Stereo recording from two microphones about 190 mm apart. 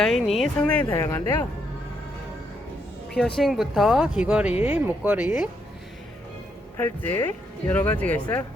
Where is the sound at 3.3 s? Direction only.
Centre (ahead or behind).